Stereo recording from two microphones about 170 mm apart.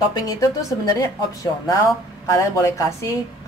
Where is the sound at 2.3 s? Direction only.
15° left (ahead or behind).